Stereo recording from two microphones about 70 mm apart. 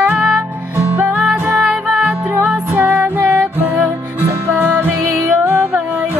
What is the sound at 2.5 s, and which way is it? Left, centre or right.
Music, right.